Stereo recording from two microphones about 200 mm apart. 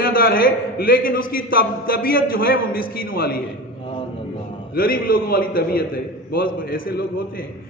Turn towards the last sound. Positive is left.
turn(degrees=50)  # may be behind; listen again after turning